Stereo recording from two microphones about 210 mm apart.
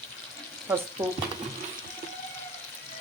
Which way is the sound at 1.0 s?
10° right (ahead or behind).